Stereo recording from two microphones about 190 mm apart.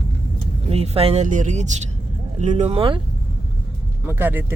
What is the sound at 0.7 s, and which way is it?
Speech, 30° right (ahead or behind).